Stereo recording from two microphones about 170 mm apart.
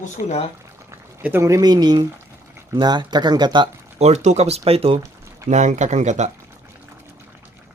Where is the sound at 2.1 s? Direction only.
15° right (ahead or behind).